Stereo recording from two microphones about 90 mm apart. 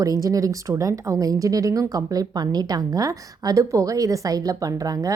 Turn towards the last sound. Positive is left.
turn(degrees=-40)  # may be behind; listen again after turning